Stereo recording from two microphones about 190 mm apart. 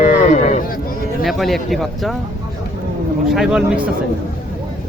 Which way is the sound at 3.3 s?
5° right (ahead or behind).